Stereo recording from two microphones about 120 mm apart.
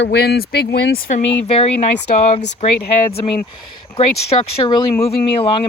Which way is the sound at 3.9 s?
55° left (ahead or behind).